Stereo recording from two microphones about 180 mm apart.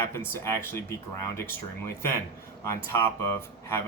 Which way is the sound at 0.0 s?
15° left (ahead or behind).